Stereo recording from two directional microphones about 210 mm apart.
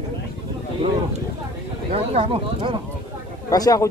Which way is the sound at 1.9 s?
25° right (ahead or behind).